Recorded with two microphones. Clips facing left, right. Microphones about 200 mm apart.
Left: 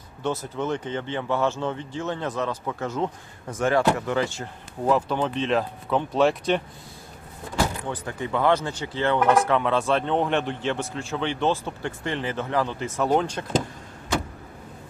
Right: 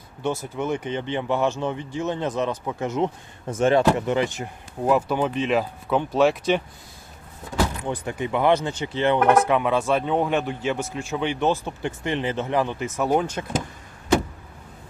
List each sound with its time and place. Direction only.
0.2 s speech: 10° right (ahead or behind)
7.9 s speech: 15° right (ahead or behind)